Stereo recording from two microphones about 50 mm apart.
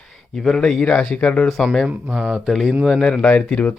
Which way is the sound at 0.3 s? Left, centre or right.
Centre.